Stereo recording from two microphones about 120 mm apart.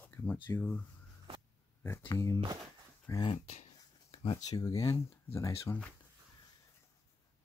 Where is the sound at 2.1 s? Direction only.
25° left (ahead or behind).